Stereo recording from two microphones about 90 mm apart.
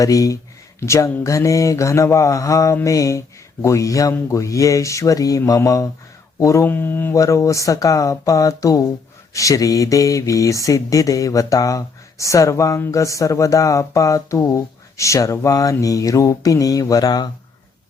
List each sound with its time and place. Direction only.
0.0 s speech: 40° left (ahead or behind)
6.7 s speech: 20° left (ahead or behind)
7.1 s speech: 35° left (ahead or behind)